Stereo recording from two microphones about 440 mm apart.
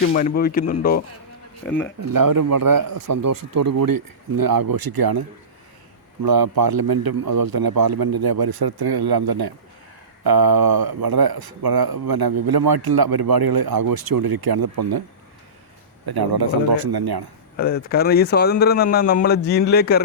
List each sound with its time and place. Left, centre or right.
0.0 s speech: centre
1.6 s speech: centre
2.0 s speech: right
6.2 s speech: right
16.0 s a man's voice: right
16.9 s a man's voice: right
17.6 s speech: left